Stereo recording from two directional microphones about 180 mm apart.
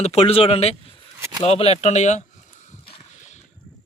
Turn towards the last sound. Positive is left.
turn(degrees=35)  # may be behind; listen again after turning